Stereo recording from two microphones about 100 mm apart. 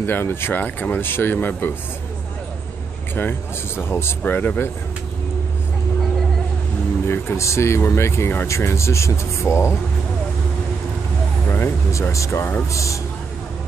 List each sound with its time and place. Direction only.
0.0 s speech: 20° left (ahead or behind)
3.2 s speech: 20° left (ahead or behind)
7.1 s speech: 25° left (ahead or behind)
11.5 s speech: 20° left (ahead or behind)